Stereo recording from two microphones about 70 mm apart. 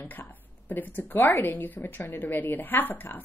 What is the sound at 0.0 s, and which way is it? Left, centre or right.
A woman's voice, left.